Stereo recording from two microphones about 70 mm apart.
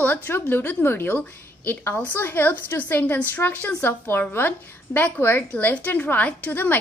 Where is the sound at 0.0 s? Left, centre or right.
Left.